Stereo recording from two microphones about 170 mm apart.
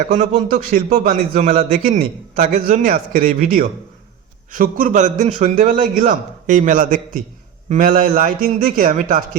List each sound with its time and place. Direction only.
0.1 s a man's voice: 40° right (ahead or behind)
0.5 s a man's voice: 50° right (ahead or behind)